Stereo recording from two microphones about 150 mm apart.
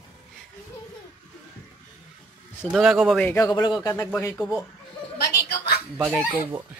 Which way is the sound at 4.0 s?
10° left (ahead or behind).